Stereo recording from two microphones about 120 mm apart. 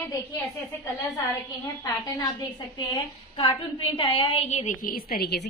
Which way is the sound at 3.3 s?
45° left (ahead or behind).